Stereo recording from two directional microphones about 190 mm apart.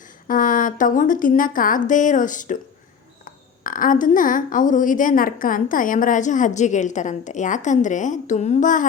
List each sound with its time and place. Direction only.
0.3 s a woman's voice: 45° left (ahead or behind)